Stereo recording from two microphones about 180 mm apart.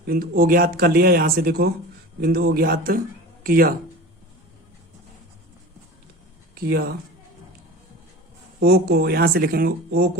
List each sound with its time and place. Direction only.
0.0 s speech: 55° right (ahead or behind)
6.5 s speech: 60° right (ahead or behind)
8.6 s speech: 60° right (ahead or behind)